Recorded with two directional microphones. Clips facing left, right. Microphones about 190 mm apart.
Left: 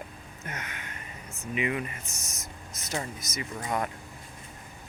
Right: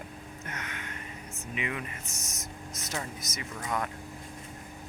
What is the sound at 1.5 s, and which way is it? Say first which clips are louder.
Speech: left 6 dB; 5° left (ahead or behind).